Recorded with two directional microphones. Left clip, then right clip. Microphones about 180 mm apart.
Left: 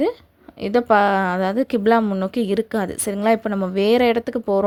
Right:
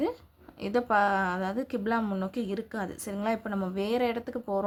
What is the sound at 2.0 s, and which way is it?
A woman's voice, 30° left (ahead or behind).